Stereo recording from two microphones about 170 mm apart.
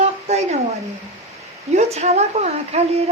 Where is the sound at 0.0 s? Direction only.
40° right (ahead or behind).